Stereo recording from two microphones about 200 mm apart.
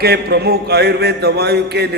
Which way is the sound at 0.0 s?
55° right (ahead or behind).